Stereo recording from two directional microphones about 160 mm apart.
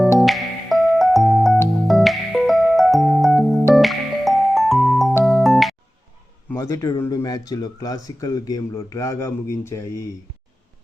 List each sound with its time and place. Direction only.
0.2 s music: centre (ahead or behind)
6.5 s speech: 20° left (ahead or behind)